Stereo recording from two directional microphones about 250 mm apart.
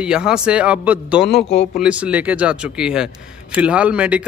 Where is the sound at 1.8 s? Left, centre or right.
Centre.